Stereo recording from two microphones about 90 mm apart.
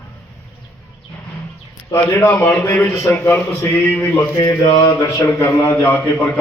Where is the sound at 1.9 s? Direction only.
30° left (ahead or behind).